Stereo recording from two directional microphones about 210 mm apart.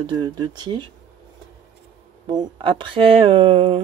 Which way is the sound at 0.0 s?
20° right (ahead or behind).